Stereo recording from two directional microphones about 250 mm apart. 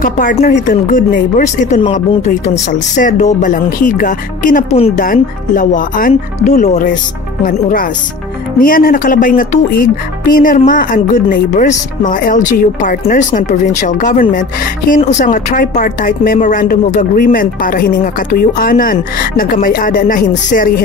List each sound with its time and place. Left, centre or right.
0.0 s a woman's voice: left
8.5 s a woman's voice: left